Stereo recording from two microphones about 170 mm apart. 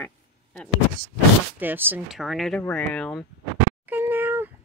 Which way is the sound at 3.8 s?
10° right (ahead or behind).